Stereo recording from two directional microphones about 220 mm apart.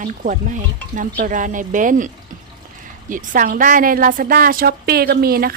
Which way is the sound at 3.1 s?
40° right (ahead or behind).